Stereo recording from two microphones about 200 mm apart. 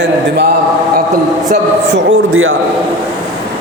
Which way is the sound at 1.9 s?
75° right (ahead or behind).